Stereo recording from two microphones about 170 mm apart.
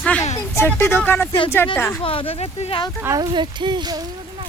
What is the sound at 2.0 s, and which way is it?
Speech, 35° left (ahead or behind).